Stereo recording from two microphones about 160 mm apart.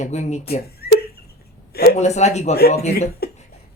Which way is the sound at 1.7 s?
75° left (ahead or behind).